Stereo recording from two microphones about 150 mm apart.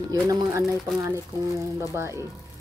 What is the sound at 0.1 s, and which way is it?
Speech, 25° right (ahead or behind).